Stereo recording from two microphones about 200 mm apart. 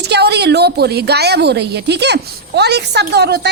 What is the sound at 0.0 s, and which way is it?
A woman's voice, 55° right (ahead or behind).